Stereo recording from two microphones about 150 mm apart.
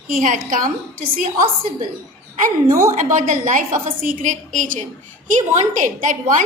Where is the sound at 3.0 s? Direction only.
60° right (ahead or behind).